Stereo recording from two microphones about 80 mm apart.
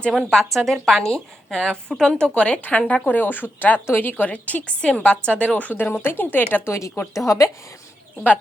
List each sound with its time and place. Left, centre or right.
0.3 s a woman's voice: centre; by 6.7 s left
6.7 s a woman's voice: left